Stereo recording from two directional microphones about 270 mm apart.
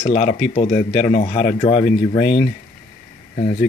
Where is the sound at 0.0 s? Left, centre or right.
Left.